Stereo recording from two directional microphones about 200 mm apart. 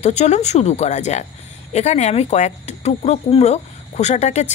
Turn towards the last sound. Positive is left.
turn(degrees=35)  # may be behind; listen again after turning